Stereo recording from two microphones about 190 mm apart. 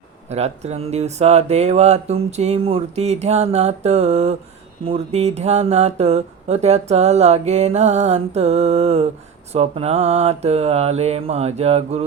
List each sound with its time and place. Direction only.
0.3 s speech: 35° right (ahead or behind)